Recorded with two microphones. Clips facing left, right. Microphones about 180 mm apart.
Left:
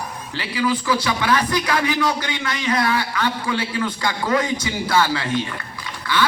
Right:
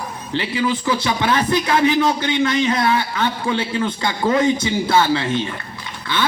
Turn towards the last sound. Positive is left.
turn(degrees=-25)  # may be behind; listen again after turning